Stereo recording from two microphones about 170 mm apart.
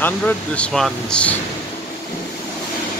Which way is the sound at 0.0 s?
5° left (ahead or behind).